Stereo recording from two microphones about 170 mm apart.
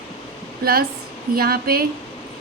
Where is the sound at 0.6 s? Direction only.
65° right (ahead or behind).